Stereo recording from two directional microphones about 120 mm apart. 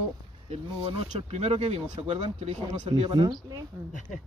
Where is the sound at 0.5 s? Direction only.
60° right (ahead or behind).